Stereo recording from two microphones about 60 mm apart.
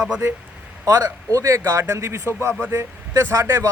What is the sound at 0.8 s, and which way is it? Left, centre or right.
Speech, right.